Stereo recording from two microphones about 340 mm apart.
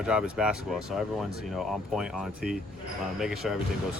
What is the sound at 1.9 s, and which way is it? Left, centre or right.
Speech, centre.